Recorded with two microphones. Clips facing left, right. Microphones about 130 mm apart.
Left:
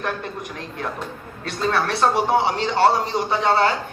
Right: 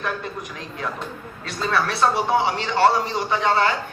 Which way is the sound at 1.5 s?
45° left (ahead or behind).